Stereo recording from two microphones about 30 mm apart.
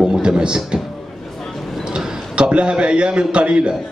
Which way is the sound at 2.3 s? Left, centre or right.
Right.